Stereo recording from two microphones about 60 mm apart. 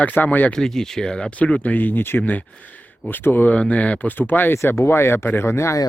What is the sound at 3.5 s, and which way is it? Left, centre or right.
Speech, left.